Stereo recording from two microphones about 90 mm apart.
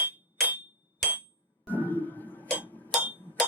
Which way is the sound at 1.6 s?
20° left (ahead or behind).